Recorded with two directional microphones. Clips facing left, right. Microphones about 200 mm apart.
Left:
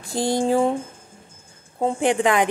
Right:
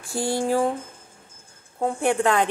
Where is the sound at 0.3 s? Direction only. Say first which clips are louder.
Left 3 dB; 20° left (ahead or behind).